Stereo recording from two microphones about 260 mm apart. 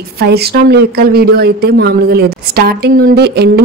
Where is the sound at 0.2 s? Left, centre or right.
Right.